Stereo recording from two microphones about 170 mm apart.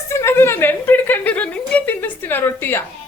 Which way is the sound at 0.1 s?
15° left (ahead or behind).